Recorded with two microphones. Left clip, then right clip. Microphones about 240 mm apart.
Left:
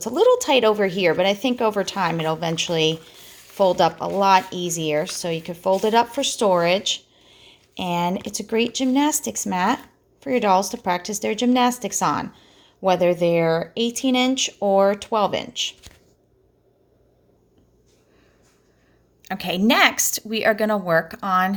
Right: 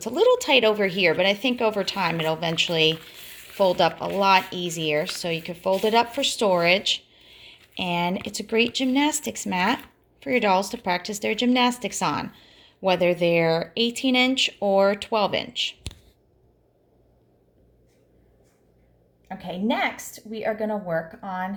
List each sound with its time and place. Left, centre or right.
0.0 s speech: centre
19.2 s a woman's voice: left